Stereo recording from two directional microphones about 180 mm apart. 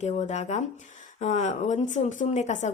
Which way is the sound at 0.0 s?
40° left (ahead or behind).